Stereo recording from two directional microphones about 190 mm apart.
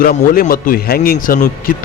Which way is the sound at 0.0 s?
50° left (ahead or behind).